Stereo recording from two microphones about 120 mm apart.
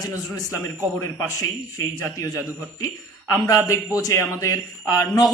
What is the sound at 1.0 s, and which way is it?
Speech, 25° left (ahead or behind).